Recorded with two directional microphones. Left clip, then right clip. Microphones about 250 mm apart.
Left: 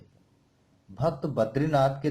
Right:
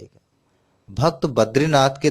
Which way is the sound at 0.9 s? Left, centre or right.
Right.